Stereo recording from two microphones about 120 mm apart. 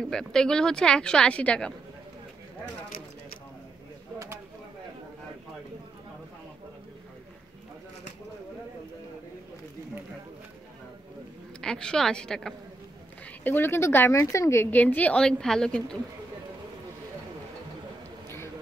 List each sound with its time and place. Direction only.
0.0 s a woman's voice: 5° left (ahead or behind)
11.6 s a woman's voice: 5° left (ahead or behind)
13.4 s a woman's voice: 15° left (ahead or behind)